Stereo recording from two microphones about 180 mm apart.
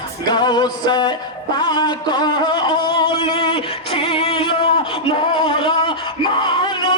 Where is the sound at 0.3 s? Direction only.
25° left (ahead or behind).